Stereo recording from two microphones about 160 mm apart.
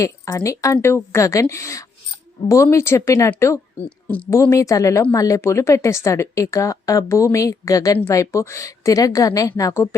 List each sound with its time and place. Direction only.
0.0 s speech: 20° left (ahead or behind)